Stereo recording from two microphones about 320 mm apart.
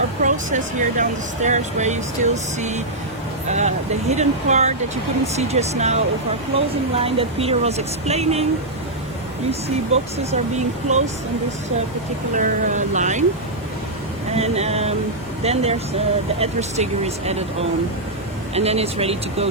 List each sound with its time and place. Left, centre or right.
0.2 s speech: right
9.5 s speech: centre
12.4 s speech: right
14.3 s speech: centre
18.5 s speech: centre